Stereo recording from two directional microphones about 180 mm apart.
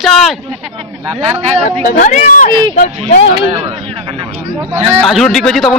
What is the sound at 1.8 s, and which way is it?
Speech, 45° left (ahead or behind).